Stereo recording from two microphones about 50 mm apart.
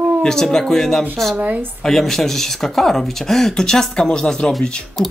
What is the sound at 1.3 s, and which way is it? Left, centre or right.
Speech, right.